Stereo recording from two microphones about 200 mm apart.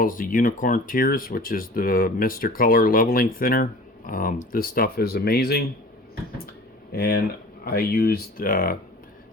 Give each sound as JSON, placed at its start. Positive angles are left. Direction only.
{"t": 0.0, "sound": "speech", "side_deg": 45}
{"t": 6.9, "sound": "speech", "side_deg": 50}